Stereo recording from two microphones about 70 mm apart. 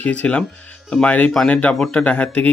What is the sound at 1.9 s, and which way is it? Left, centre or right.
Speech, centre.